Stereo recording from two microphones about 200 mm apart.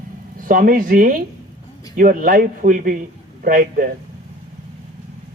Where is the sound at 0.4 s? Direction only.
45° right (ahead or behind).